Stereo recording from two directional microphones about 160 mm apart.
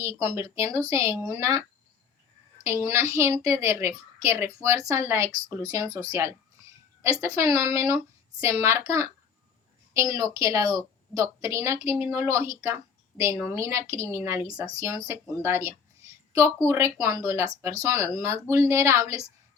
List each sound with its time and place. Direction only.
0.0 s a woman's voice: 20° right (ahead or behind)
2.8 s a woman's voice: 15° right (ahead or behind)